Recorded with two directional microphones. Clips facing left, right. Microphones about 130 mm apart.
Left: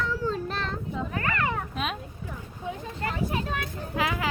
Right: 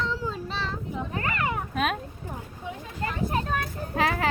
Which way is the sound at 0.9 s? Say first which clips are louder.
Left 1 dB; 25° right (ahead or behind).